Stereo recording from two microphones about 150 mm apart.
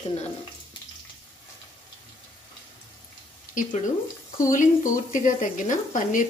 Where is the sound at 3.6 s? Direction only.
65° left (ahead or behind).